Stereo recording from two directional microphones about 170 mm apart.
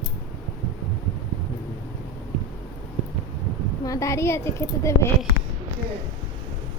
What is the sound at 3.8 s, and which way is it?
Speech, 20° left (ahead or behind).